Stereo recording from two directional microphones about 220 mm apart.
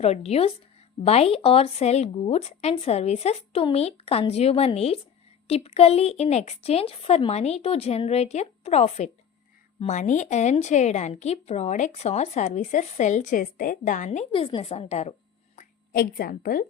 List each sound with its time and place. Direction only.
0.0 s a woman's voice: 30° left (ahead or behind)
15.5 s a woman's voice: 40° left (ahead or behind)